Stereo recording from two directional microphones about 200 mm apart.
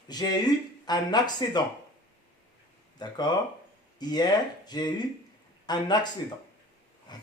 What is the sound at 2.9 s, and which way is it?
Speech, 20° left (ahead or behind).